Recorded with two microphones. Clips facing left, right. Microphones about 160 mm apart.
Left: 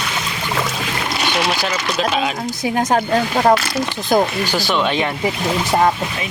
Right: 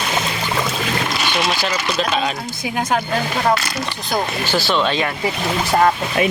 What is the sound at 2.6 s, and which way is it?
Speech, 40° left (ahead or behind).